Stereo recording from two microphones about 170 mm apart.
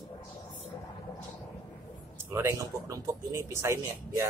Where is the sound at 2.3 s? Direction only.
15° right (ahead or behind).